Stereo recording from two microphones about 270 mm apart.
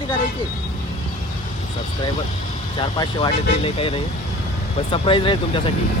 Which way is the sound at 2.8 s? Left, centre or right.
Centre.